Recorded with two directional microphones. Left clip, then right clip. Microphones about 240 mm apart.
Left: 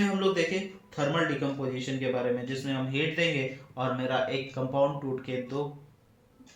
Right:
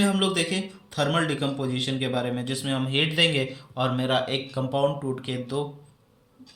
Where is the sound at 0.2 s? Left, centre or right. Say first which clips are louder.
Right 2 dB; right.